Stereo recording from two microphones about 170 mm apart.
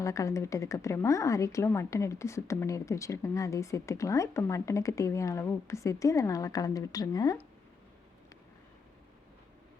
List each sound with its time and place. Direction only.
0.0 s a woman's voice: 20° left (ahead or behind)